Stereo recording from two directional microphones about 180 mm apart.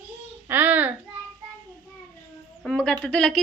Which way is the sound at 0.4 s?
10° right (ahead or behind).